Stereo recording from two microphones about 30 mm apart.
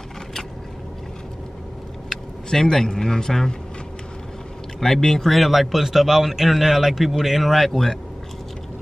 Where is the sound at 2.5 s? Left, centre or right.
Centre.